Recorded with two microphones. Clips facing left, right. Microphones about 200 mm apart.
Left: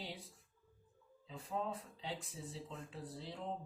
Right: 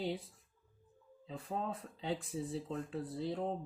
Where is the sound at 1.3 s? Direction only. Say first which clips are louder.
Right 2 dB; 55° right (ahead or behind).